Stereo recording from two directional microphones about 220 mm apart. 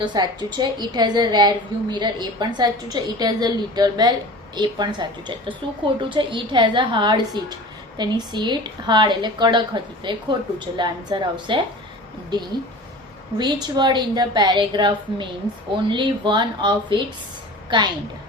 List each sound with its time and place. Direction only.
0.0 s a woman's voice: 20° right (ahead or behind)
13.4 s a woman's voice: 20° right (ahead or behind)